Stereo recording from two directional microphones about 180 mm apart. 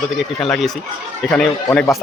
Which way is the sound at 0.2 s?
Centre (ahead or behind).